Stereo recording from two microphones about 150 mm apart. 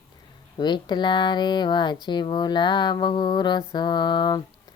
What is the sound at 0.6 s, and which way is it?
Speech, 30° left (ahead or behind).